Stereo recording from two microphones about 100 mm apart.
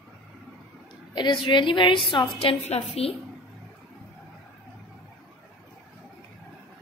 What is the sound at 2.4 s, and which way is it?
Speech, 80° left.